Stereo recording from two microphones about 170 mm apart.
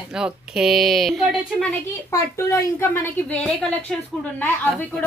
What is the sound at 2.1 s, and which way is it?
A woman's voice, 15° left (ahead or behind).